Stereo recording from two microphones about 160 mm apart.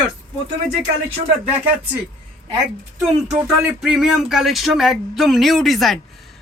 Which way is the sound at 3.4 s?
5° right (ahead or behind).